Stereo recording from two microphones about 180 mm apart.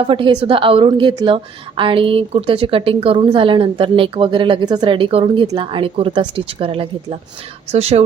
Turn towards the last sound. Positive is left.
turn(degrees=-35)  # may be behind; listen again after turning